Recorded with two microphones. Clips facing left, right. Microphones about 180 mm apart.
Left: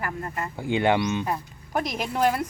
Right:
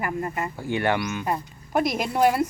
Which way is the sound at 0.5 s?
15° left (ahead or behind).